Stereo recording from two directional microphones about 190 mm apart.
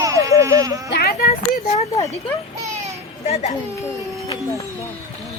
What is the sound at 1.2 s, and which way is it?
Speech, 35° left (ahead or behind).